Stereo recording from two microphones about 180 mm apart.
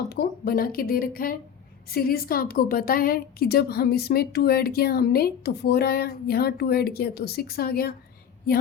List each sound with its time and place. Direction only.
0.1 s a woman's voice: 60° left (ahead or behind)